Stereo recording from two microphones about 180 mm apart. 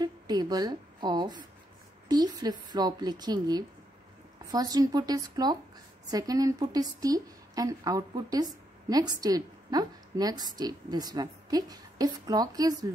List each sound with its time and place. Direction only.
0.0 s a woman's voice: 20° right (ahead or behind)